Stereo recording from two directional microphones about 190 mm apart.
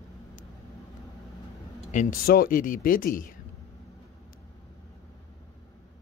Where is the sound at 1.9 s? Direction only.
45° left (ahead or behind).